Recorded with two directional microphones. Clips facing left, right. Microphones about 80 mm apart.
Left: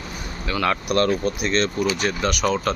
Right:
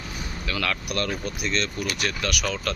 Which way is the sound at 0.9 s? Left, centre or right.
Left.